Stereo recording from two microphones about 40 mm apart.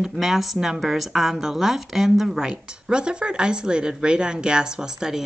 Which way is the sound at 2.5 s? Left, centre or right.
Right.